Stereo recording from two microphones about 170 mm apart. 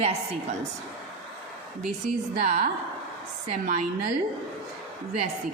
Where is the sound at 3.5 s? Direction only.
45° right (ahead or behind).